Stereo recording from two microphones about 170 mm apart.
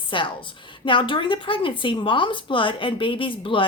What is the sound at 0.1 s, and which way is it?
A woman's voice, 30° left (ahead or behind).